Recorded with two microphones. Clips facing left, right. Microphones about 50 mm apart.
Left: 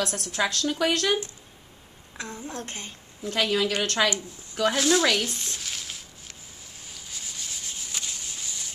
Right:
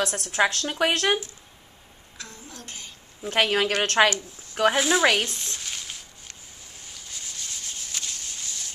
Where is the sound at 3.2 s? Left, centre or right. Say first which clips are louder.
Right 2 dB; right.